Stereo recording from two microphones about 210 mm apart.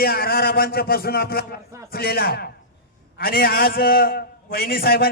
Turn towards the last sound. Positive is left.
turn(degrees=45)  # may be behind; listen again after turning